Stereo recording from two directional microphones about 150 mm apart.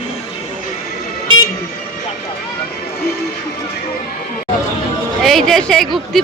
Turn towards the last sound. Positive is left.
turn(degrees=0)  # may be behind; listen again after turning